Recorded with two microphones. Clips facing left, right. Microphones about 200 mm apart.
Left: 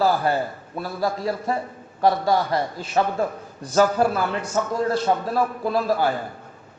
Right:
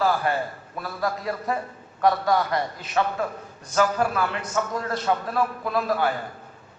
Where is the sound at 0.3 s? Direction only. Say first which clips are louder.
Left 3 dB; 35° left (ahead or behind).